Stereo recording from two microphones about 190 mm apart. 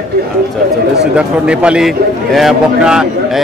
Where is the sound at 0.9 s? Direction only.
5° right (ahead or behind).